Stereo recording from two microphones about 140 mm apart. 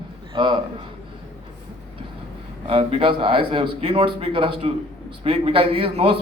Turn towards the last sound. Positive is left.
turn(degrees=-40)  # may be behind; listen again after turning